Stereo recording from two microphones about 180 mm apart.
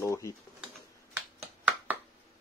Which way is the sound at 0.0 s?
15° left (ahead or behind).